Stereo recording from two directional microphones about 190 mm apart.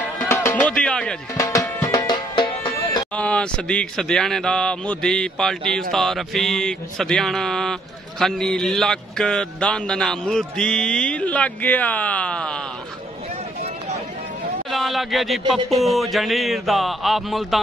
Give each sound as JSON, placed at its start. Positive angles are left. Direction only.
{"t": 0.2, "sound": "music", "side_deg": 10}
{"t": 1.3, "sound": "music", "side_deg": 15}
{"t": 3.2, "sound": "speech", "side_deg": 5}
{"t": 14.7, "sound": "speech", "side_deg": 0}